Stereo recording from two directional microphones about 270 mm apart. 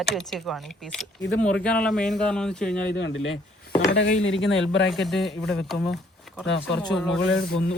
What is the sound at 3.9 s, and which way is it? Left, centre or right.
Speech, left.